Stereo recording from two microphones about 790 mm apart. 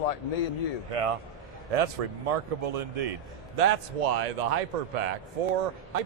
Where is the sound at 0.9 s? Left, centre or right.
Right.